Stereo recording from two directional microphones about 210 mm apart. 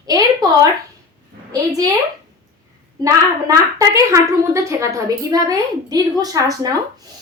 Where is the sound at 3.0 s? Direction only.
15° right (ahead or behind).